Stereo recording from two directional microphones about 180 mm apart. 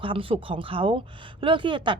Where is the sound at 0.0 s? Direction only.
30° right (ahead or behind).